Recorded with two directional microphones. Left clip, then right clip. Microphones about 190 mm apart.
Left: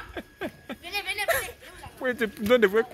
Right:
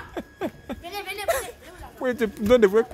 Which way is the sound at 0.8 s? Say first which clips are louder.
Left 3 dB; 55° right (ahead or behind).